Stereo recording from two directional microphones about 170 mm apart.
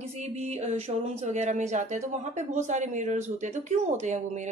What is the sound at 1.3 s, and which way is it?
Speech, 45° right (ahead or behind).